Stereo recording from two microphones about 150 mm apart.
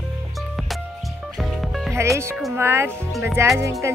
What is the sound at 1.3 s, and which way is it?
Music, centre (ahead or behind).